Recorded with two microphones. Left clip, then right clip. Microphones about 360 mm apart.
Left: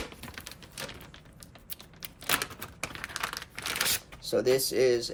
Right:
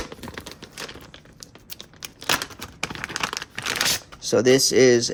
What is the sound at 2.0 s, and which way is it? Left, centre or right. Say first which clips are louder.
Crumpling: right 6 dB; centre.